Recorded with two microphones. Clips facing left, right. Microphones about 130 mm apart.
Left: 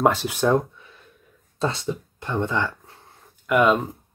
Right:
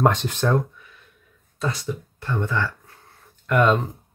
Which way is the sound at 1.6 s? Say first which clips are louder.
Left 2 dB; 25° left (ahead or behind).